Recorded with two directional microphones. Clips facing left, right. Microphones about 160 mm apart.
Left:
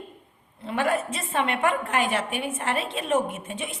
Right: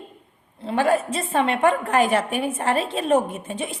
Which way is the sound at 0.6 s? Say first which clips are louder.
Right 5 dB; 30° right (ahead or behind).